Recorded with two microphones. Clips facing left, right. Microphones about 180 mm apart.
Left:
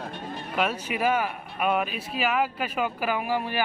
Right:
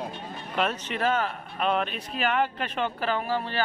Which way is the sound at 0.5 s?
10° left (ahead or behind).